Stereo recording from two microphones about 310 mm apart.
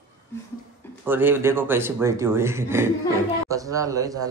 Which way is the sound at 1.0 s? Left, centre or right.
Centre.